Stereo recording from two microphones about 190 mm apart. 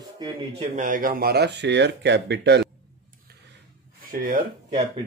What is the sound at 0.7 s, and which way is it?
Speech, 45° right (ahead or behind).